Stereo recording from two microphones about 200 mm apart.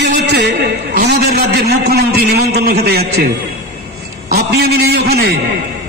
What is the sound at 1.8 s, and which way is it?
A man's voice, 55° right (ahead or behind).